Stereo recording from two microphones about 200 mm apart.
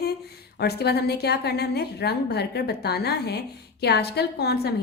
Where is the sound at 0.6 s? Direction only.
55° left (ahead or behind).